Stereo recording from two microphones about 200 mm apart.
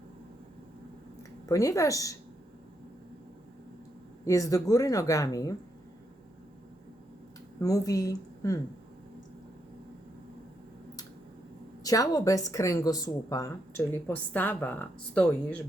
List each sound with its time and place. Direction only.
1.5 s a woman's voice: 15° left (ahead or behind)
4.3 s a woman's voice: 15° left (ahead or behind)
7.6 s a woman's voice: 15° left (ahead or behind)
11.8 s a woman's voice: 20° left (ahead or behind)